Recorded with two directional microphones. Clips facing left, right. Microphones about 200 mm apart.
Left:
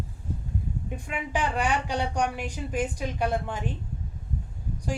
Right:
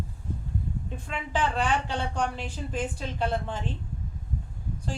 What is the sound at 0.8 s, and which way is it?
A woman's voice, 15° left (ahead or behind).